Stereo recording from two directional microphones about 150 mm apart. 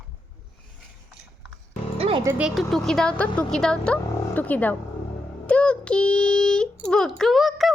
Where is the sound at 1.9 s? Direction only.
40° right (ahead or behind).